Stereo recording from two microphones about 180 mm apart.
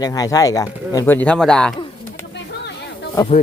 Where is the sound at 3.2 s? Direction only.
15° left (ahead or behind).